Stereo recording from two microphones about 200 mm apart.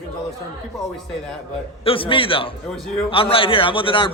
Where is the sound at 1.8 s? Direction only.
25° left (ahead or behind).